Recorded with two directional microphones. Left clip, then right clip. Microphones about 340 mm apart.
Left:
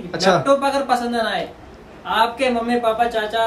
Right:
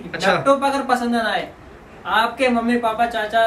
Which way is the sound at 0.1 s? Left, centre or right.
Centre.